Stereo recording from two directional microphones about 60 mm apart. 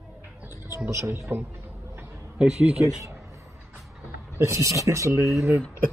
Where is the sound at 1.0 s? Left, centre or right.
Right.